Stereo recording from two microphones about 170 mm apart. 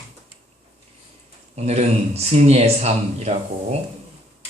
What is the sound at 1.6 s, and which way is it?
Speech, 40° right (ahead or behind).